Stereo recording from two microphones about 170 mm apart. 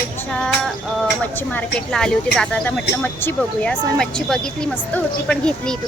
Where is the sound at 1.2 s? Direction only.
10° left (ahead or behind).